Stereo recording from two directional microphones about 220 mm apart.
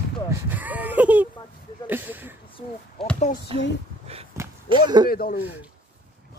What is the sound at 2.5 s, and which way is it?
Speech, 25° left (ahead or behind).